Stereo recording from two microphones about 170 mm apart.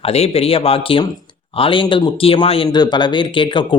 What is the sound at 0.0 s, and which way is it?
Speech, 35° left (ahead or behind).